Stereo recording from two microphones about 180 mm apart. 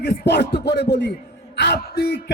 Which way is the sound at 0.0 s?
65° left (ahead or behind).